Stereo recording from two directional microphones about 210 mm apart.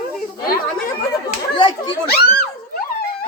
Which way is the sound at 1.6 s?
25° left (ahead or behind).